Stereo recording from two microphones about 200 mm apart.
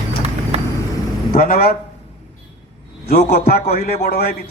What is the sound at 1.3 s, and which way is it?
Speech, 45° left (ahead or behind).